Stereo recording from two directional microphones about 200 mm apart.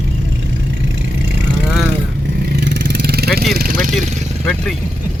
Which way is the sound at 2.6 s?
50° right (ahead or behind).